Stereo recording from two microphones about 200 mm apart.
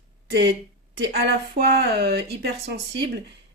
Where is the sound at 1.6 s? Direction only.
50° right (ahead or behind).